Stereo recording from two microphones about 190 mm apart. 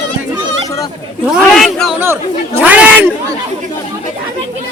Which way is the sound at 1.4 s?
Centre (ahead or behind).